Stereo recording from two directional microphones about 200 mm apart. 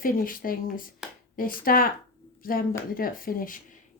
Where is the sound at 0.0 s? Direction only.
45° left (ahead or behind).